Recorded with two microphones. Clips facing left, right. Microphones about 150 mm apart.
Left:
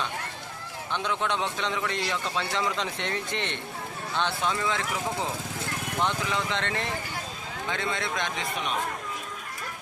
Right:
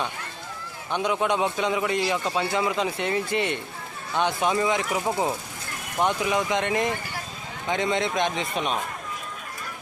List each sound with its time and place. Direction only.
0.9 s speech: 15° right (ahead or behind)
6.0 s speech: 15° right (ahead or behind)